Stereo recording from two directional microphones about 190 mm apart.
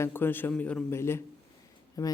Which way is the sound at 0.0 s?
10° left (ahead or behind).